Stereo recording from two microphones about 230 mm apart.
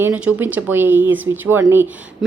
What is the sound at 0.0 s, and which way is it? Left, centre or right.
Speech, centre.